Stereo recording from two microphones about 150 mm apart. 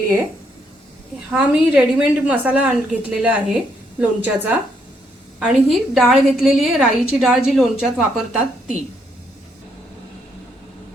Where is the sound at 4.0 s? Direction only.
10° right (ahead or behind).